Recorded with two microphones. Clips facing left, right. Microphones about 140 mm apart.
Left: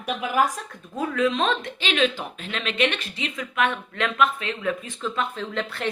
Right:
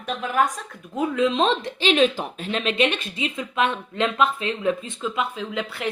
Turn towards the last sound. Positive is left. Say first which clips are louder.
# even
turn(degrees=-10)  # may be behind; listen again after turning